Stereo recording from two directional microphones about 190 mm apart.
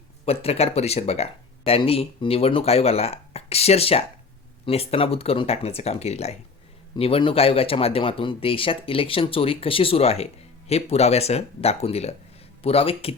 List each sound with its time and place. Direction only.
0.3 s speech: 30° left (ahead or behind)